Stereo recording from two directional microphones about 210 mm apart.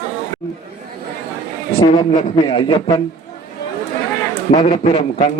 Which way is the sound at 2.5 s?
25° left (ahead or behind).